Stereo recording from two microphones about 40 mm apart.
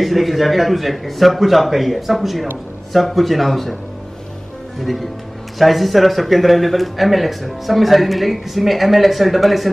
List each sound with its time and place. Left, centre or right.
0.0 s speech: centre
4.7 s speech: centre